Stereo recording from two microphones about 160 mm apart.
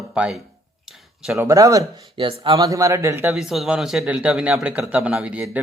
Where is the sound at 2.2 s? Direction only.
30° right (ahead or behind).